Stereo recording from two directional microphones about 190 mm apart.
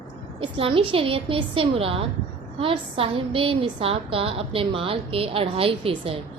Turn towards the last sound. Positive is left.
turn(degrees=-30)  # may be behind; listen again after turning